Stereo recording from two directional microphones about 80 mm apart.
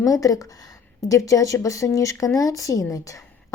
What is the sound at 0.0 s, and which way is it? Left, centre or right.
Speech, left.